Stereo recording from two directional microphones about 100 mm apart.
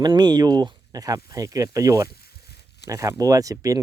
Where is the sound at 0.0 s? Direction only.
45° right (ahead or behind).